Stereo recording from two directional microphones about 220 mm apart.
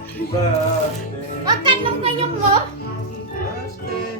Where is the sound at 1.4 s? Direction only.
20° right (ahead or behind).